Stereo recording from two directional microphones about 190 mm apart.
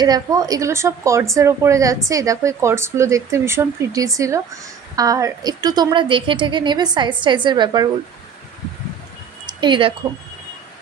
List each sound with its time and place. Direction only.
0.0 s a woman's voice: 20° right (ahead or behind)
9.5 s speech: 25° right (ahead or behind)